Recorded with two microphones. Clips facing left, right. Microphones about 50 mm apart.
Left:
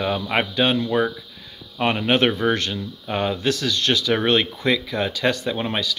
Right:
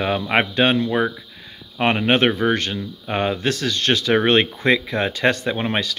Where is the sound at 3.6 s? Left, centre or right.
Right.